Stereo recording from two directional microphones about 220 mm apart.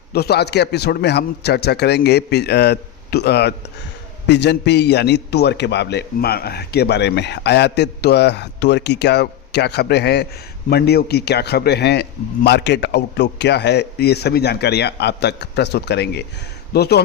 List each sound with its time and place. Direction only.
0.1 s a man's voice: 45° left (ahead or behind)